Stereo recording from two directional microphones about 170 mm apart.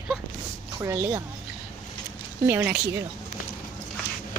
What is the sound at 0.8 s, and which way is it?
Speech, 15° right (ahead or behind).